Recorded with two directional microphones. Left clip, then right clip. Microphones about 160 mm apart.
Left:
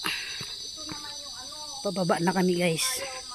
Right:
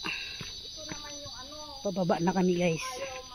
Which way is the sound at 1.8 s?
30° left (ahead or behind).